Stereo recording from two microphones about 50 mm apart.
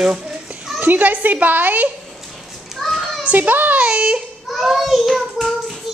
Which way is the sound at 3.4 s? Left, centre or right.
Right.